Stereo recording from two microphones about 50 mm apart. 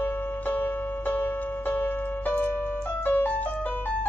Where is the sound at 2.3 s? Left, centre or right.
Left.